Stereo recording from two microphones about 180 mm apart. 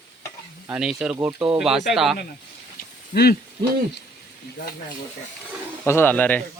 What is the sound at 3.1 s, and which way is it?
Speech, 60° left (ahead or behind).